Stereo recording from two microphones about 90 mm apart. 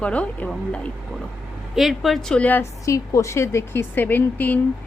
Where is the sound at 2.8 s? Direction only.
35° left (ahead or behind).